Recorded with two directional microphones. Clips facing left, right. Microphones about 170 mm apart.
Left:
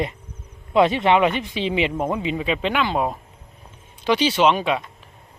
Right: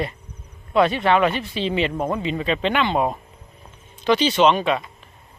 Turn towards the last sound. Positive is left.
turn(degrees=10)  # may be behind; listen again after turning